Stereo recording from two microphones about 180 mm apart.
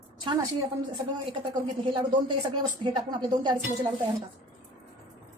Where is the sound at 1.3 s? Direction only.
30° right (ahead or behind).